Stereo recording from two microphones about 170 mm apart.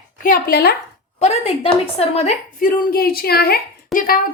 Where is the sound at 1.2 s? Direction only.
35° left (ahead or behind).